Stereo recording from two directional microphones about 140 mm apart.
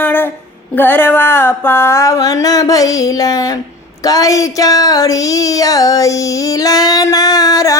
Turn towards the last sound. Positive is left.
turn(degrees=25)  # may be behind; listen again after turning